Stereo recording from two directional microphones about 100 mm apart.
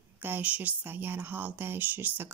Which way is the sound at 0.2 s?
20° right (ahead or behind).